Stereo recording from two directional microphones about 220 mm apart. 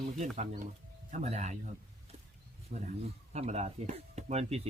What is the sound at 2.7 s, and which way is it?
Speech, 35° right (ahead or behind).